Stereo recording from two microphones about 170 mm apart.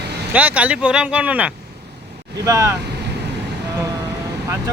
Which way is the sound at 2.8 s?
75° right (ahead or behind).